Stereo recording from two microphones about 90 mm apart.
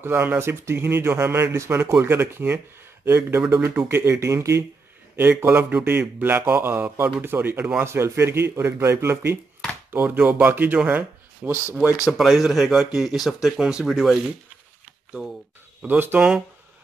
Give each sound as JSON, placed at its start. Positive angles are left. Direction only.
{"t": 0.0, "sound": "speech", "side_deg": -25}
{"t": 5.1, "sound": "speech", "side_deg": -20}
{"t": 12.1, "sound": "speech", "side_deg": 0}
{"t": 15.8, "sound": "speech", "side_deg": -20}